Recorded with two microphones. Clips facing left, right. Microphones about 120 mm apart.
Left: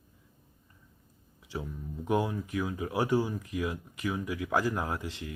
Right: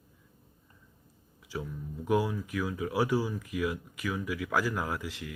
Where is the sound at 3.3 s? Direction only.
35° left (ahead or behind).